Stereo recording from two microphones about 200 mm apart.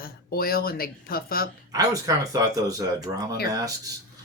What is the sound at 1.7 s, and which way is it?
Speech, 15° right (ahead or behind).